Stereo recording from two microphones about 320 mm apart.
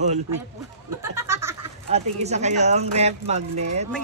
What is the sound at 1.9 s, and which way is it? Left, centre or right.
Speech, centre.